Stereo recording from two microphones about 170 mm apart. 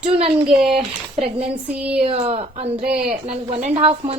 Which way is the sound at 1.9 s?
35° right (ahead or behind).